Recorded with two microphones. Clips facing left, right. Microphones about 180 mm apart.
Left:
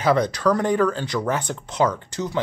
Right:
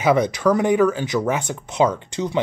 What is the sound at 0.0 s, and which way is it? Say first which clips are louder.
Speech: right 2 dB; 10° right (ahead or behind).